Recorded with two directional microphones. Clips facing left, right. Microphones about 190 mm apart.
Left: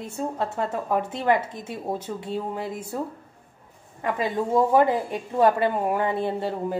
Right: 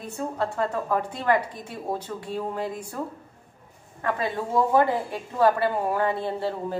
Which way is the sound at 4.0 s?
20° left (ahead or behind).